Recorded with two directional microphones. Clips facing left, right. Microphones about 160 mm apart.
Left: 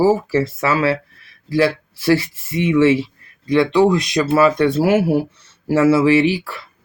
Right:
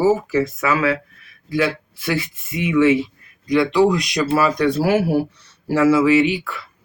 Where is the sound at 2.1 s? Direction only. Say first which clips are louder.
Left 7 dB; 30° left (ahead or behind).